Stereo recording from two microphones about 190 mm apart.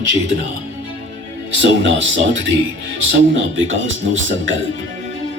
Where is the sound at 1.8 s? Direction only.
75° right (ahead or behind).